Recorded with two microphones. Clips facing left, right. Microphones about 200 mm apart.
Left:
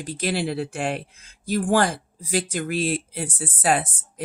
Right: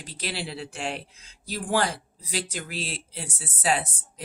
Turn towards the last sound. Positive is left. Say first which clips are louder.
# left 4 dB
turn(degrees=50)  # may be behind; listen again after turning